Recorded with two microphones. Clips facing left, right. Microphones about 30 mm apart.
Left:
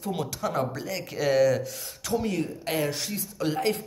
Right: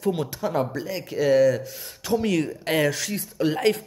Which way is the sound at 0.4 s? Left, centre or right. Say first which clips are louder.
Right 3 dB; centre.